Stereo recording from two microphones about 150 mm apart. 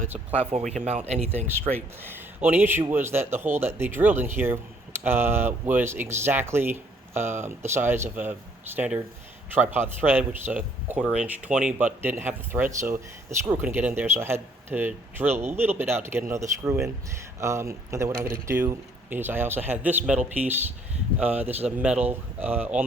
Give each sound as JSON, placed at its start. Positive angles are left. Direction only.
{"t": 0.3, "sound": "speech", "side_deg": -50}
{"t": 2.0, "sound": "speech", "side_deg": -15}